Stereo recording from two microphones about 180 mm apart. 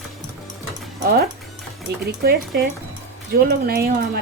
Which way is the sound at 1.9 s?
60° right (ahead or behind).